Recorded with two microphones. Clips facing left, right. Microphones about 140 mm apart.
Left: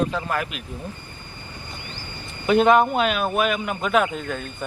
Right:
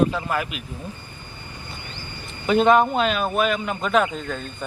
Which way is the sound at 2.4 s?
5° left (ahead or behind).